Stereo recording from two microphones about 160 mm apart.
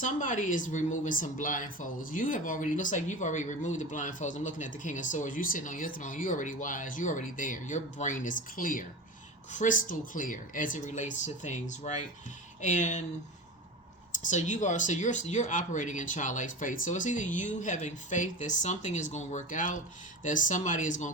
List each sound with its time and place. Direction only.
0.0 s speech: 55° left (ahead or behind)
14.2 s speech: 50° left (ahead or behind)